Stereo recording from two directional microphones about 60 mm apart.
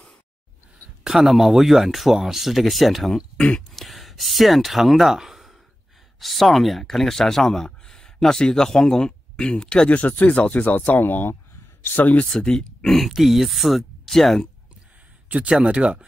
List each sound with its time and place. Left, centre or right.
1.0 s speech: centre
3.3 s speech: centre
3.7 s speech: centre
9.8 s speech: left
12.3 s speech: centre
15.2 s speech: right